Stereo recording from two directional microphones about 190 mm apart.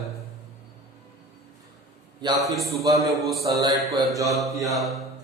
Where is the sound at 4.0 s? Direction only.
15° right (ahead or behind).